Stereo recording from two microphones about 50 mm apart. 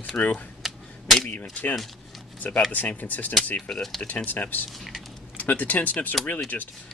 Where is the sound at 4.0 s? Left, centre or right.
Left.